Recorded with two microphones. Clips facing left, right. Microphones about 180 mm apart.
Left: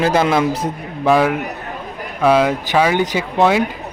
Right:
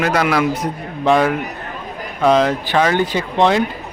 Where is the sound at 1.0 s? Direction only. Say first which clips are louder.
Even; 5° left (ahead or behind).